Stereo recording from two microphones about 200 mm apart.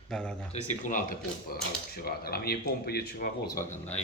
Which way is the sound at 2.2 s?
50° left (ahead or behind).